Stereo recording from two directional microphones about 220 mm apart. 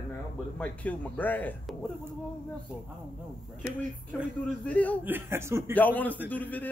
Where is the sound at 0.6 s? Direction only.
5° left (ahead or behind).